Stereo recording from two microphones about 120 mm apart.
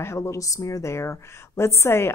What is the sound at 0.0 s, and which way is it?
Speech, 20° left (ahead or behind).